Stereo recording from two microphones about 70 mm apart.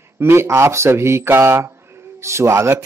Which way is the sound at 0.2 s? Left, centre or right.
Right.